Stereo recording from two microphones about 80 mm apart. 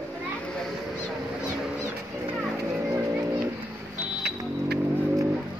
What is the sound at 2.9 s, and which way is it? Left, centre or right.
Music, right.